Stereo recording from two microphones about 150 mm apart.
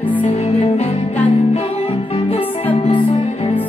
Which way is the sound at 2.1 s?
35° left (ahead or behind).